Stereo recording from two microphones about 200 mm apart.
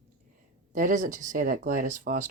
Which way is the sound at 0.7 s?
40° right (ahead or behind).